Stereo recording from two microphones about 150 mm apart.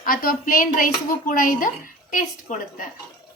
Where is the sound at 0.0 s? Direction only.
70° left (ahead or behind).